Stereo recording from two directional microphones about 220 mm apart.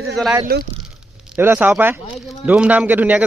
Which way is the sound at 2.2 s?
5° right (ahead or behind).